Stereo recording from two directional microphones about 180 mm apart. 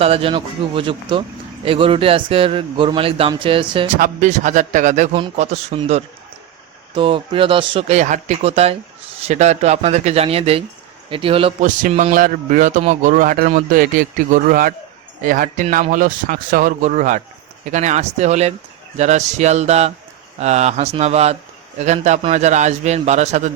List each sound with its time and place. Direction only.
0.0 s a man's voice: 30° right (ahead or behind)
3.9 s a man's voice: 45° right (ahead or behind); by 11.5 s 30° right (ahead or behind)
11.6 s a man's voice: 45° right (ahead or behind)